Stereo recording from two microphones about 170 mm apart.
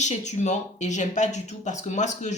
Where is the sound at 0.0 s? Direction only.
45° left (ahead or behind).